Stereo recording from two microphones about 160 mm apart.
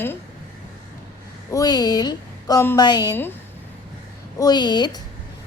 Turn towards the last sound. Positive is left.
turn(degrees=25)  # may be behind; listen again after turning